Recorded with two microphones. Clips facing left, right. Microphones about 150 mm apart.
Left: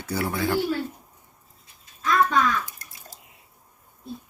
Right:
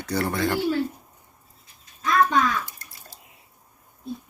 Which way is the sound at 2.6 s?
45° left (ahead or behind).